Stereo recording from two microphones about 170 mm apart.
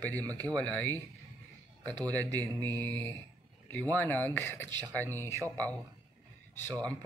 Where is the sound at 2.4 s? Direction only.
20° right (ahead or behind).